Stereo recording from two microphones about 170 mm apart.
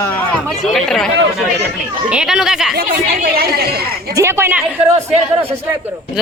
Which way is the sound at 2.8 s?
65° right (ahead or behind).